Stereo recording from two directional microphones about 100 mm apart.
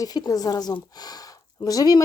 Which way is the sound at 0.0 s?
40° left (ahead or behind).